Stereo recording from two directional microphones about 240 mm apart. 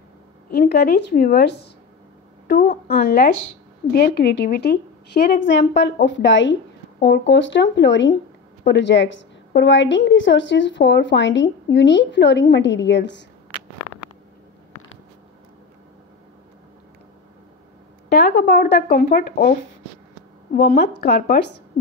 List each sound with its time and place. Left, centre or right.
0.5 s a woman's voice: left
18.1 s speech: left
20.5 s speech: left